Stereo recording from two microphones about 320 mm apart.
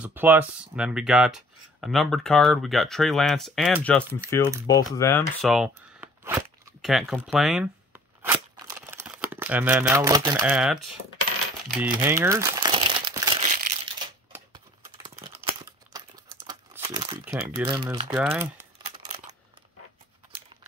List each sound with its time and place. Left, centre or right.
0.0 s speech: centre
5.4 s a sound: centre
11.8 s crumpling: centre
15.1 s crumpling: centre
17.2 s speech: centre